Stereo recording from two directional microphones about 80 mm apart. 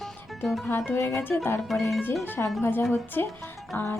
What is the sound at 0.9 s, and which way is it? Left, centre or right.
Speech, left.